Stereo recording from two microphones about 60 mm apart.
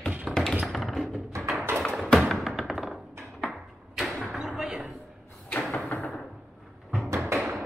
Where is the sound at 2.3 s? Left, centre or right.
Centre.